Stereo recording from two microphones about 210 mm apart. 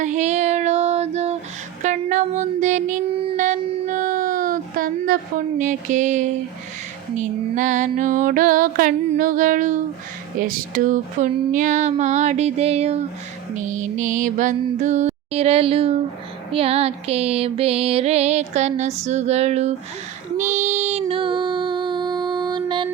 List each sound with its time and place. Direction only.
0.0 s child singing: 35° right (ahead or behind)
1.8 s a sound: 35° right (ahead or behind)
5.5 s music: 35° right (ahead or behind)
20.3 s child singing: 35° right (ahead or behind)